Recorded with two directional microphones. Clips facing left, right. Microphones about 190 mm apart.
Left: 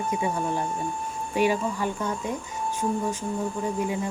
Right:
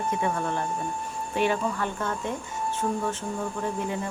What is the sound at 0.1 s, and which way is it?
Speech, 10° left (ahead or behind).